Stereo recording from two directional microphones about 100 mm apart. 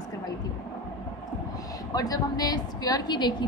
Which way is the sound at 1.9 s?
40° left (ahead or behind).